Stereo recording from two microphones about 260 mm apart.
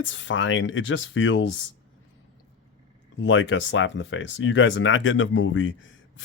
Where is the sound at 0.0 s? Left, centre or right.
Left.